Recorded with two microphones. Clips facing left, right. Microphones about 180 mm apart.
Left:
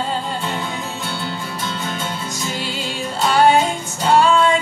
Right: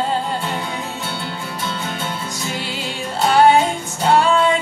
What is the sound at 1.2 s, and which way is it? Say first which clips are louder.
Music: even; 45° left (ahead or behind).